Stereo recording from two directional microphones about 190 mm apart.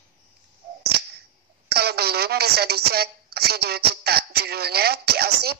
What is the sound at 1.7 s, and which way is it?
A woman's voice, 55° right (ahead or behind).